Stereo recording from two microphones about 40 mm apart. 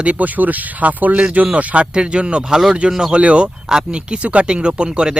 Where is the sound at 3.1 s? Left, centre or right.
Right.